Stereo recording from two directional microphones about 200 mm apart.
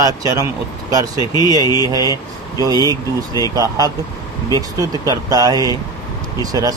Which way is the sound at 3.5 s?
20° right (ahead or behind).